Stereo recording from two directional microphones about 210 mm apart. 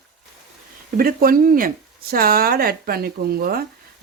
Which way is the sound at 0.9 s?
45° right (ahead or behind).